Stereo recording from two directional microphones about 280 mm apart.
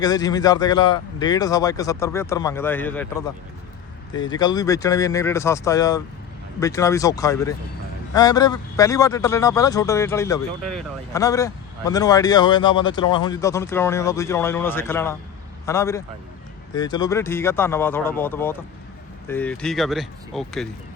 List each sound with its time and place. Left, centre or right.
0.0 s speech: centre